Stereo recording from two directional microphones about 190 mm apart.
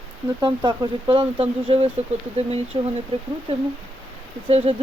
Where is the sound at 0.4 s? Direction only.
25° right (ahead or behind).